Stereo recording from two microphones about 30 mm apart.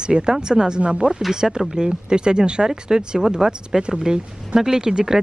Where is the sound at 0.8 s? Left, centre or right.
Right.